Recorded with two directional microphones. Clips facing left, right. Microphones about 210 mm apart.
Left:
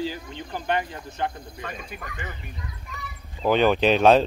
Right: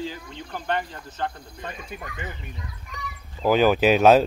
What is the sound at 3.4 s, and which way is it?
Speech, 5° right (ahead or behind).